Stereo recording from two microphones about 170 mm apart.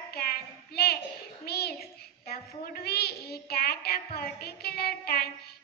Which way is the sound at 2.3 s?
65° left (ahead or behind).